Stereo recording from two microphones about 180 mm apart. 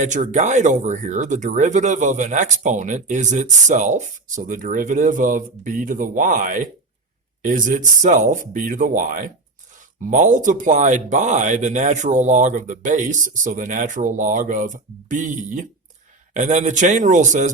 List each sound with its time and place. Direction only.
0.0 s speech: 40° right (ahead or behind)